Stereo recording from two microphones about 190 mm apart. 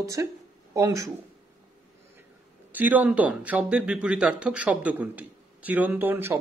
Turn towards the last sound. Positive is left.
turn(degrees=-10)  # may be behind; listen again after turning